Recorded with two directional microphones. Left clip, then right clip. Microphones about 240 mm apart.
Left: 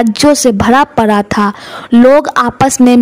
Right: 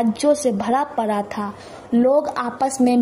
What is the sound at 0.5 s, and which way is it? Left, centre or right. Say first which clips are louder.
A woman's voice: left 11 dB; left.